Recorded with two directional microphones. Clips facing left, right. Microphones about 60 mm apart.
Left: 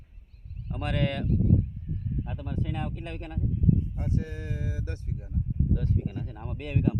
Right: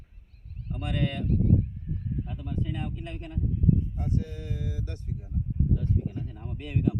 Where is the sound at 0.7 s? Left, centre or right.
Left.